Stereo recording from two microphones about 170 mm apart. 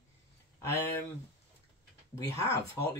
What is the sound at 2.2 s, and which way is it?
Speech, 15° left (ahead or behind).